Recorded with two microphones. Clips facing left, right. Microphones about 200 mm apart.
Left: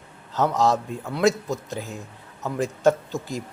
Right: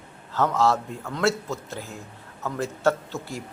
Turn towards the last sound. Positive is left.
turn(degrees=15)  # may be behind; listen again after turning